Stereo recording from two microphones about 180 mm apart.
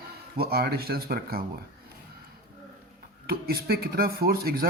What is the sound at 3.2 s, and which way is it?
Speech, 60° right (ahead or behind).